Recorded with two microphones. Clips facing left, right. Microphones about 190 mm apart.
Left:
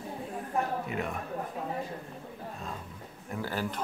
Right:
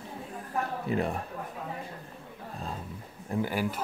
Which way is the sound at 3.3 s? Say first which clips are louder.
Right 6 dB; 30° right (ahead or behind).